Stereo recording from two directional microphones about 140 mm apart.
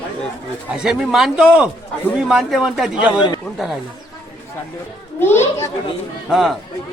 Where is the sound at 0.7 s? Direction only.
5° right (ahead or behind).